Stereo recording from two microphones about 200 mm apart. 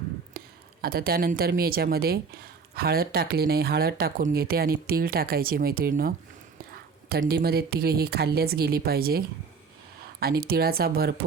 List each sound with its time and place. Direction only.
0.3 s speech: 50° right (ahead or behind)
7.2 s speech: 50° right (ahead or behind)